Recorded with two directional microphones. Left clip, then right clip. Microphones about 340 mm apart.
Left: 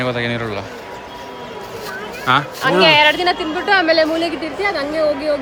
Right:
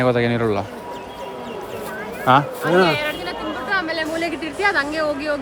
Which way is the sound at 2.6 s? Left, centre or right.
Centre.